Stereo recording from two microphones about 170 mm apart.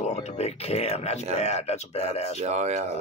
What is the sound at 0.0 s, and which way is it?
Speech, 40° left (ahead or behind).